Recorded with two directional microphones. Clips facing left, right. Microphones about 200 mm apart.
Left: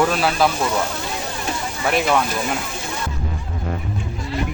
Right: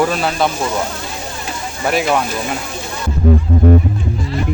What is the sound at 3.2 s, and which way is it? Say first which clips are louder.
Music: right 16 dB; 55° right (ahead or behind).